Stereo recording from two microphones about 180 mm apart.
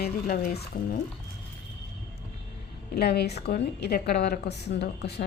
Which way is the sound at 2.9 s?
65° left (ahead or behind).